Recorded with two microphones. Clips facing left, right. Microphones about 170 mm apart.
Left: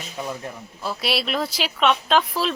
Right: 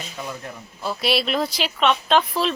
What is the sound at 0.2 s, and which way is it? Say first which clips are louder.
Speech: left 3 dB; 20° left (ahead or behind).